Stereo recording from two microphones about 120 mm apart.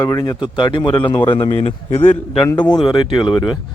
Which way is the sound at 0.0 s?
30° left (ahead or behind).